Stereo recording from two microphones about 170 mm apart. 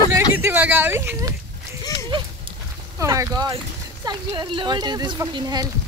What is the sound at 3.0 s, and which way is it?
Speech, 20° right (ahead or behind).